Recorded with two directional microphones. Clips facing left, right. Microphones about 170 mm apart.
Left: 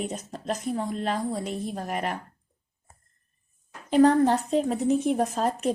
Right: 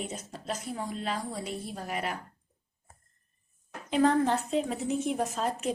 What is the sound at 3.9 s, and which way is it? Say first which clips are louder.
Speech: left 6 dB; 40° left (ahead or behind).